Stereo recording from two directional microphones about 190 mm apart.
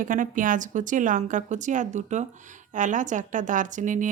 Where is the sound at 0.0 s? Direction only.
45° right (ahead or behind).